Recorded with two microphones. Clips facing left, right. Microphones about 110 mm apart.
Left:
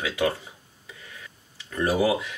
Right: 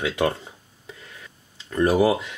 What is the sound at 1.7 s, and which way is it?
Speech, 25° right (ahead or behind).